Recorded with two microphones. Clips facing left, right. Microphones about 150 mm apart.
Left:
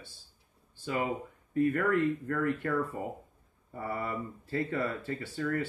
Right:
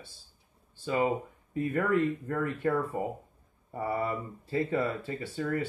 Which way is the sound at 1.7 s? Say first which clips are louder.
Right 1 dB; 20° right (ahead or behind).